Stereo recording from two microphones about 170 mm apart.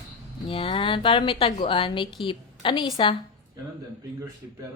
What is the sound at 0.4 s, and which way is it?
A woman's voice, 35° left (ahead or behind).